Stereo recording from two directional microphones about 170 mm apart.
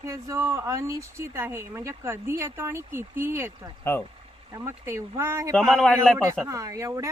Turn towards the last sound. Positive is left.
turn(degrees=-20)  # may be behind; listen again after turning